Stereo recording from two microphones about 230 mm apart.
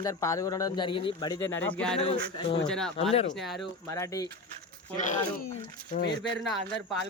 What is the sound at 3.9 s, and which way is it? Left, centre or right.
Speech, centre.